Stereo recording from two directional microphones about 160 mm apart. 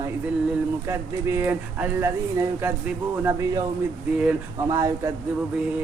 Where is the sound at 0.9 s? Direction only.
15° right (ahead or behind).